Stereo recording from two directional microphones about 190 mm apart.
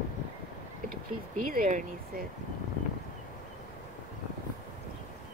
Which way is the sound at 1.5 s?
45° right (ahead or behind).